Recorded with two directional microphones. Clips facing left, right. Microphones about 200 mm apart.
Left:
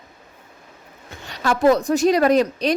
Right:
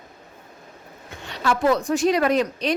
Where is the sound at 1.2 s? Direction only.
40° left (ahead or behind).